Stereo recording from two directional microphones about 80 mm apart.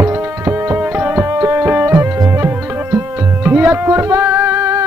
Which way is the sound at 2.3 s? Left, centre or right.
Right.